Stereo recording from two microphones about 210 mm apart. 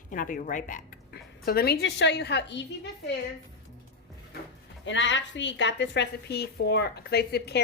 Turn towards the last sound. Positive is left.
turn(degrees=50)  # may be behind; listen again after turning